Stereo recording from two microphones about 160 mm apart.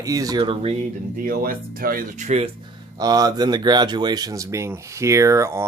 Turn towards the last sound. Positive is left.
turn(degrees=-15)  # may be behind; listen again after turning